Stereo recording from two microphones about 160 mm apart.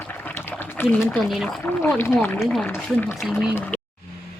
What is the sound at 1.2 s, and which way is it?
Speech, centre (ahead or behind).